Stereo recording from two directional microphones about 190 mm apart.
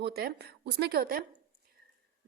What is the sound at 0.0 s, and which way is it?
A woman's voice, 55° right (ahead or behind).